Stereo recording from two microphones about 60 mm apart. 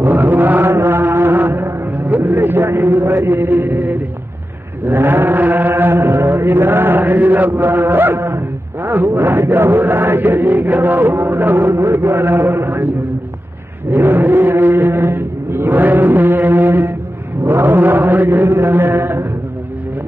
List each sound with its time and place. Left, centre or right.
0.0 s music: right
4.8 s chant: right
11.8 s a man's voice: right
13.8 s a sound: right
17.4 s mantra: right